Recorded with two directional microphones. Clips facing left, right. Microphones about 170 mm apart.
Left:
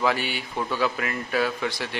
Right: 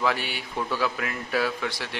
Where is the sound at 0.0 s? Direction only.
Centre (ahead or behind).